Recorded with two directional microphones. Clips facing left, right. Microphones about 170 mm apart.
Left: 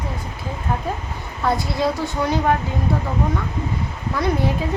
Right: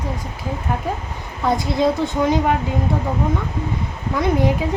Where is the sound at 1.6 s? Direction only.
20° right (ahead or behind).